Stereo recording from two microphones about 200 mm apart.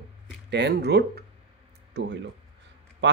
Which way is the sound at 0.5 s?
60° right (ahead or behind).